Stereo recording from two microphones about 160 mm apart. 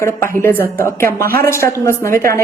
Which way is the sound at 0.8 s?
15° left (ahead or behind).